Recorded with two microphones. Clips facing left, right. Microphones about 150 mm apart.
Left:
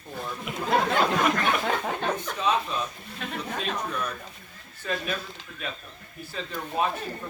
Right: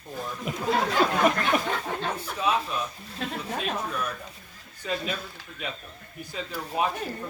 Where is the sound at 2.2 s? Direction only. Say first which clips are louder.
Left 1 dB; 10° right (ahead or behind).